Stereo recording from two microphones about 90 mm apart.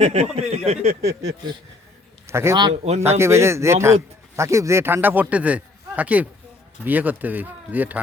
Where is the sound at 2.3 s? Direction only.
30° right (ahead or behind).